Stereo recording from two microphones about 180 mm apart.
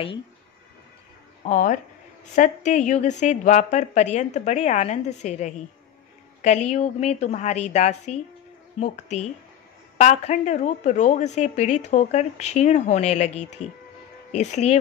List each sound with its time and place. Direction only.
1.4 s a woman's voice: 45° left (ahead or behind)
9.9 s a woman's voice: 40° left (ahead or behind)